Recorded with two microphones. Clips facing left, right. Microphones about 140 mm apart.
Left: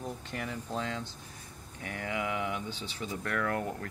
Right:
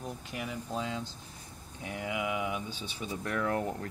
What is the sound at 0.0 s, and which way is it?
Speech, 5° right (ahead or behind).